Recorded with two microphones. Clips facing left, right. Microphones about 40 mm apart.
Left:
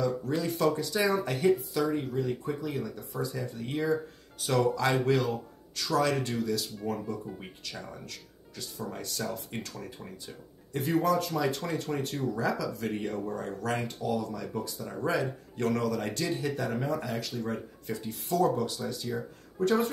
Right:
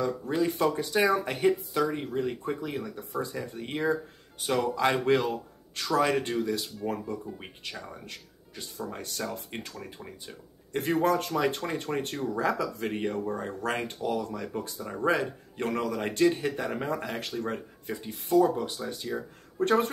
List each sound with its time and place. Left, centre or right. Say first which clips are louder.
0.0 s speech: right 2 dB; right
3.0 s speech: right 2 dB; right
3.3 s speech: even; right
9.2 s speech: even; right
10.7 s speech: right 1 dB; right
17.8 s speech: right 2 dB; right